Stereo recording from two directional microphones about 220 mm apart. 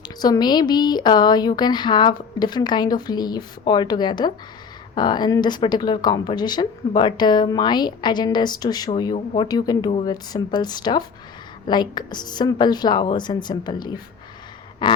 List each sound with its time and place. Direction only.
0.0 s speech: 20° left (ahead or behind)